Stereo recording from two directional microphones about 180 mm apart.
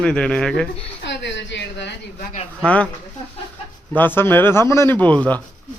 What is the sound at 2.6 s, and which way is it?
Speech, 5° left (ahead or behind).